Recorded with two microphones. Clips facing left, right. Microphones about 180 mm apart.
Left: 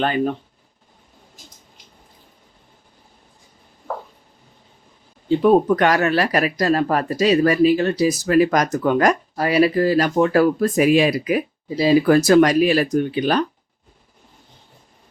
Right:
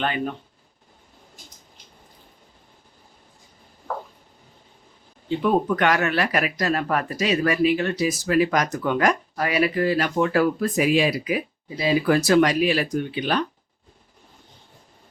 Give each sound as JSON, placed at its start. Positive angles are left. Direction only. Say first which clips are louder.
{"t": 0.0, "sound": "speech", "louder": "left 6 dB", "side_deg": 40}
{"t": 5.4, "sound": "speech", "louder": "left 6 dB", "side_deg": 35}
{"t": 11.8, "sound": "speech", "louder": "left 6 dB", "side_deg": 40}